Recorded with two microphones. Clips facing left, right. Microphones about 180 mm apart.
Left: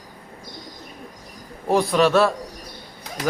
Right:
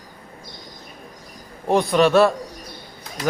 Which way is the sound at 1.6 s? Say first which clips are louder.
Right 1 dB; 5° left (ahead or behind).